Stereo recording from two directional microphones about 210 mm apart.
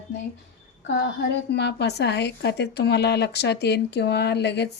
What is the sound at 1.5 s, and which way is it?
A woman's voice, 55° left (ahead or behind).